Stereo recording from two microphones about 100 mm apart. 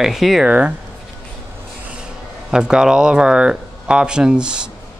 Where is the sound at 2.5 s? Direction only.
5° right (ahead or behind).